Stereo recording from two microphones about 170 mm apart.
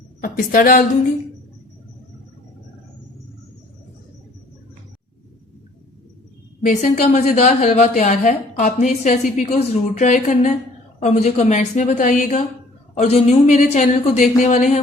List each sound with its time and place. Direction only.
0.2 s a woman's voice: 55° left (ahead or behind)
6.6 s a woman's voice: 50° left (ahead or behind)
12.9 s a woman's voice: 40° left (ahead or behind)